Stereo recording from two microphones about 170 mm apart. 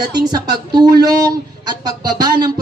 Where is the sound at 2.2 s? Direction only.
25° right (ahead or behind).